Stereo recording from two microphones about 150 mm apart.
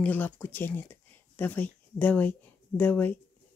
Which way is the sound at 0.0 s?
10° left (ahead or behind).